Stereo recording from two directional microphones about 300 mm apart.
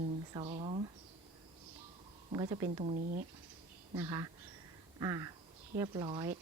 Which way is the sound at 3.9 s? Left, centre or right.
Centre.